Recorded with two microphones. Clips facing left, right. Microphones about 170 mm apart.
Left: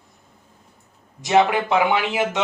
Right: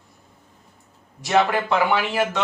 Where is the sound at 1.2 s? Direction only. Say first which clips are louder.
Left 2 dB; 20° left (ahead or behind).